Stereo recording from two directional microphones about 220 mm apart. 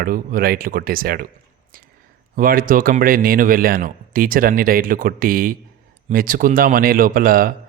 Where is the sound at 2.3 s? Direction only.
40° right (ahead or behind).